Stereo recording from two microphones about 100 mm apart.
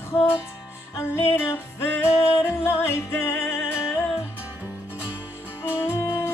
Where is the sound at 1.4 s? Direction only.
25° left (ahead or behind).